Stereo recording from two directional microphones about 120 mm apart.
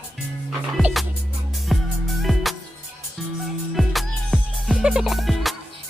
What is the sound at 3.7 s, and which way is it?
Music, centre (ahead or behind).